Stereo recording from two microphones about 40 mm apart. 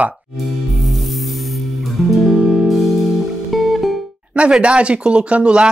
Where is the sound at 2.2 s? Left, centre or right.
Centre.